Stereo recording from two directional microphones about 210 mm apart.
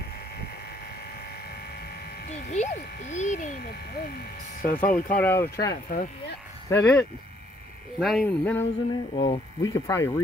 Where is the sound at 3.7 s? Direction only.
50° left (ahead or behind).